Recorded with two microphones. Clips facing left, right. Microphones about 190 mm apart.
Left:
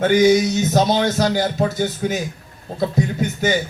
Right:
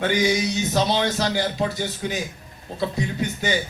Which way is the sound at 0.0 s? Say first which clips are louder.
Left 7 dB; 45° left (ahead or behind).